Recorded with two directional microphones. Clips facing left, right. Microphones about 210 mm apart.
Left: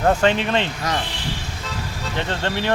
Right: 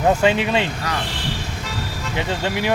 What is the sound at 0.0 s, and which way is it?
Speech, 10° right (ahead or behind).